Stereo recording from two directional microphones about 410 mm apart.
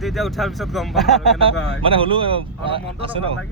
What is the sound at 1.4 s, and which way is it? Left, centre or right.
Speech, centre.